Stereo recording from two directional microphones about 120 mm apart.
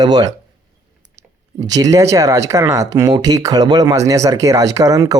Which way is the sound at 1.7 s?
25° right (ahead or behind).